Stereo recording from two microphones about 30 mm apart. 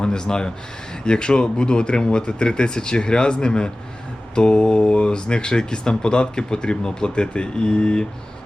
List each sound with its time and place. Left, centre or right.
0.0 s speech: left